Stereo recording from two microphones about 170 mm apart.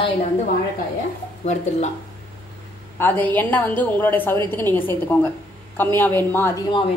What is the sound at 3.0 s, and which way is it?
A woman's voice, 10° left (ahead or behind).